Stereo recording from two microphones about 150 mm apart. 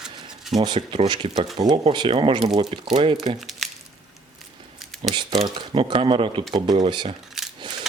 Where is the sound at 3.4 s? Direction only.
Centre (ahead or behind).